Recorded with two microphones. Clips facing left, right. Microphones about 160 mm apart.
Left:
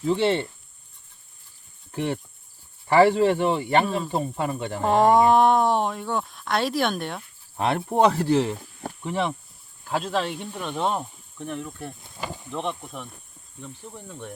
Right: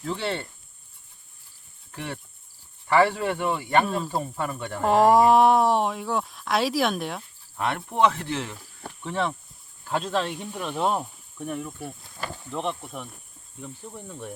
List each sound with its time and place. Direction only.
0.0 s speech: 20° left (ahead or behind)
1.9 s speech: 30° left (ahead or behind)
3.8 s speech: centre (ahead or behind)
4.1 s speech: 20° left (ahead or behind)
4.8 s speech: centre (ahead or behind)
7.5 s speech: 35° left (ahead or behind)
9.0 s speech: 10° left (ahead or behind); by 11.9 s 5° right (ahead or behind)
12.0 s a sound: 15° left (ahead or behind)
12.5 s speech: centre (ahead or behind)